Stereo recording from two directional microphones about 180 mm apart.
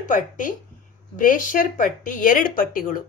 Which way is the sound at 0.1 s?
45° left (ahead or behind).